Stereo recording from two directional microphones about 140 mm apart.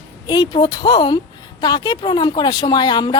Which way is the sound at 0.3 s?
30° left (ahead or behind).